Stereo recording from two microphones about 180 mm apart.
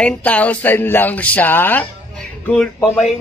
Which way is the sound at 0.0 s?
10° left (ahead or behind).